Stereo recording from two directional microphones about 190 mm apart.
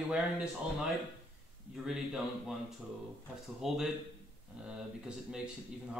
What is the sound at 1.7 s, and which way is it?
Speech, 5° right (ahead or behind).